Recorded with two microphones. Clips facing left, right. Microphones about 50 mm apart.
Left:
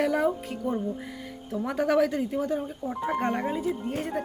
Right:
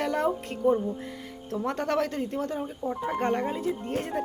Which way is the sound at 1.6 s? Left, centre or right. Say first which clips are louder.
Left 4 dB; centre.